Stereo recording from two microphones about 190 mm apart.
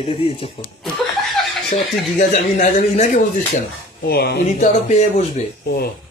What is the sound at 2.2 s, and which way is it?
Speech, 40° left (ahead or behind).